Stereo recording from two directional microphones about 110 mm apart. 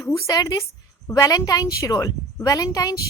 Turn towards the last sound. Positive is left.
turn(degrees=35)  # may be behind; listen again after turning